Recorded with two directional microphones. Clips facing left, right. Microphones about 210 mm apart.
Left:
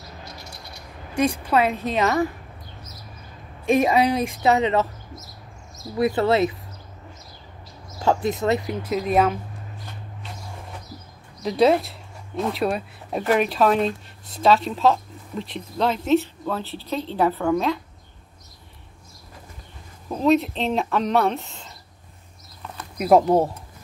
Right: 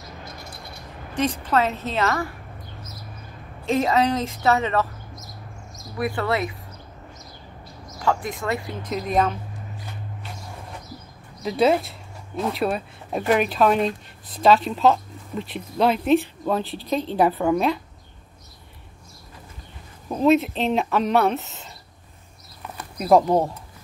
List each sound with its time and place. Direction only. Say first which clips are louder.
1.1 s a woman's voice: left 2 dB; 10° left (ahead or behind)
3.6 s speech: left 2 dB; 15° left (ahead or behind)
8.0 s speech: left 4 dB; 25° left (ahead or behind)
8.8 s a woman's voice: left 2 dB; 5° left (ahead or behind)
11.4 s speech: left 1 dB; centre (ahead or behind)
15.9 s a woman's voice: left 1 dB; 15° right (ahead or behind)
20.1 s speech: right 1 dB; 5° right (ahead or behind)
22.9 s speech: left 1 dB; 5° left (ahead or behind)